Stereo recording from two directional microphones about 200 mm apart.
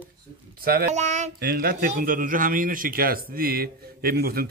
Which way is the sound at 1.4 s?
50° right (ahead or behind).